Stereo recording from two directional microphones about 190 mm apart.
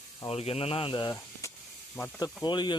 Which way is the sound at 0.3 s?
30° left (ahead or behind).